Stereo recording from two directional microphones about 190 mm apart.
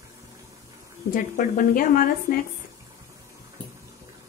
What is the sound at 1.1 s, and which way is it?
Speech, 45° left (ahead or behind).